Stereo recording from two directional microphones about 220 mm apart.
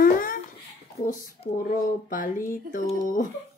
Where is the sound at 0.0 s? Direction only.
40° left (ahead or behind).